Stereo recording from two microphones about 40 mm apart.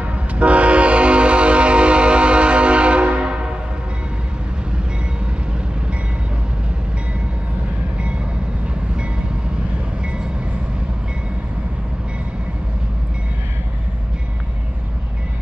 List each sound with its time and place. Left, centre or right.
0.0 s train horn: right